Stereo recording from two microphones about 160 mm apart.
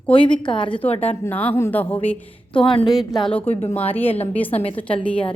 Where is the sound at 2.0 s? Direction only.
10° left (ahead or behind).